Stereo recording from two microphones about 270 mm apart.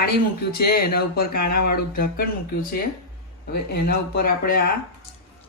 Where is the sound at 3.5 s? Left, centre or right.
Left.